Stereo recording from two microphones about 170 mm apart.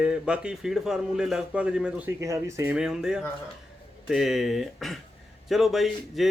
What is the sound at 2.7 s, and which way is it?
A man's voice, 5° right (ahead or behind).